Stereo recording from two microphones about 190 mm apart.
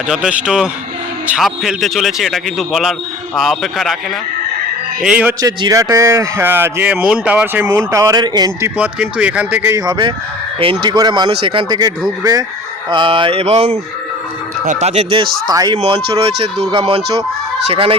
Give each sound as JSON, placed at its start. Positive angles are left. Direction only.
{"t": 0.1, "sound": "a man's voice", "side_deg": -5}
{"t": 5.0, "sound": "speech", "side_deg": -5}
{"t": 5.4, "sound": "speech", "side_deg": -20}
{"t": 8.8, "sound": "speech", "side_deg": -5}